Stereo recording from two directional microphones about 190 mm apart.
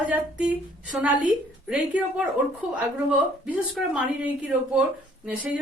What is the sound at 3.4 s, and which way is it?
A woman's voice, 10° right (ahead or behind).